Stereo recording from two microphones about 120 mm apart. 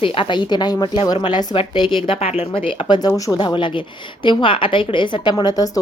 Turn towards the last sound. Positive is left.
turn(degrees=30)  # may be behind; listen again after turning